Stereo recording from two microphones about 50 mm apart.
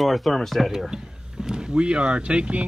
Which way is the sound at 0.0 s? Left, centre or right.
Centre.